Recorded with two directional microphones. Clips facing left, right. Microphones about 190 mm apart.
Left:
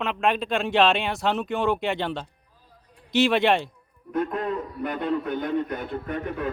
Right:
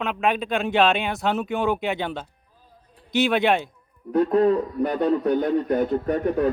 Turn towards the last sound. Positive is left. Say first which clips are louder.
# right 8 dB
turn(degrees=-40)  # may be behind; listen again after turning